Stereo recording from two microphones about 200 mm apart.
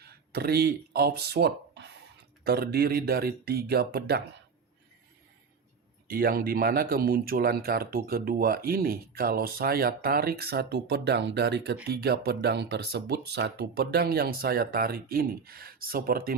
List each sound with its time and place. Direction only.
0.0 s speech: 55° right (ahead or behind)
6.1 s speech: 45° right (ahead or behind)